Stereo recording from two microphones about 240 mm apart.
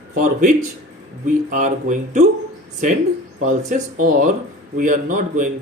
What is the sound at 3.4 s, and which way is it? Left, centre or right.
Speech, right.